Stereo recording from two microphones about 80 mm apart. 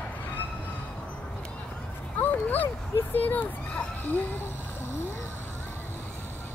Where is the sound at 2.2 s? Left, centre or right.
Left.